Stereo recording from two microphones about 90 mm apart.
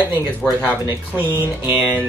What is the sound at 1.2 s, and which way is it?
Speech, 20° right (ahead or behind).